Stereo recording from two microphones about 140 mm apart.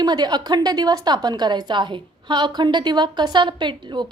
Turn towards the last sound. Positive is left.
turn(degrees=-35)  # may be behind; listen again after turning